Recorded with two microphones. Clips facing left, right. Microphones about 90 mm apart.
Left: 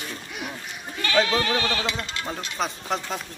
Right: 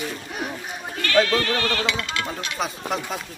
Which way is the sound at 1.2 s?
15° left (ahead or behind).